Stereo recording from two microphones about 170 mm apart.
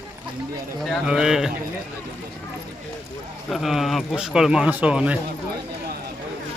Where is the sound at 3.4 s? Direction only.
Centre (ahead or behind).